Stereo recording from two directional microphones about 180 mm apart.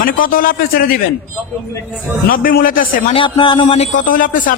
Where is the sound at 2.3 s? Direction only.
50° left (ahead or behind).